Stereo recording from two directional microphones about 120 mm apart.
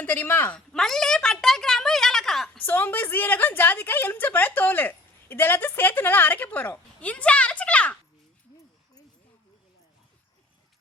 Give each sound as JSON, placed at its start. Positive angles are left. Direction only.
{"t": 0.0, "sound": "a woman's voice", "side_deg": 15}
{"t": 0.7, "sound": "a woman's voice", "side_deg": 5}
{"t": 2.6, "sound": "a woman's voice", "side_deg": 15}